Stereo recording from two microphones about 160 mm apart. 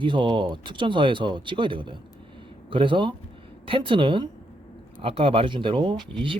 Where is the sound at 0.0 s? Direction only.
30° right (ahead or behind).